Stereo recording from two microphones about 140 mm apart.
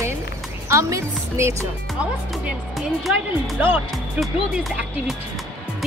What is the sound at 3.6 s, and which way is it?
Speech, 15° right (ahead or behind).